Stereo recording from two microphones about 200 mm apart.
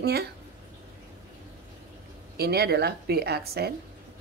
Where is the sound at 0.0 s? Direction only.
55° right (ahead or behind).